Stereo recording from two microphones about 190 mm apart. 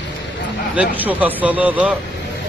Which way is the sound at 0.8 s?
10° right (ahead or behind).